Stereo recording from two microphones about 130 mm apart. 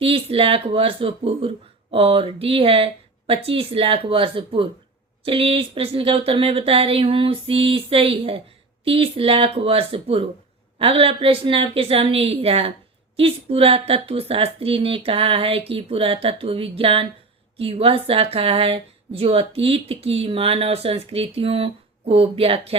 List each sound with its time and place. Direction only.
0.0 s speech: 45° right (ahead or behind)